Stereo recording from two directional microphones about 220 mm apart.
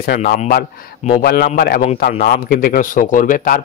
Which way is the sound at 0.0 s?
40° left (ahead or behind).